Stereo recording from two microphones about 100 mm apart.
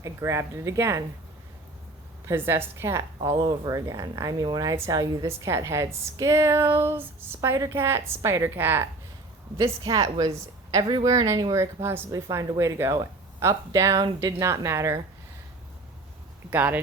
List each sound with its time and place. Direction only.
0.0 s speech: 30° right (ahead or behind)
2.2 s speech: 25° right (ahead or behind)
3.3 s speech: 50° right (ahead or behind); by 8.9 s 20° right (ahead or behind)
9.6 s speech: 35° right (ahead or behind)
16.5 s speech: 15° right (ahead or behind)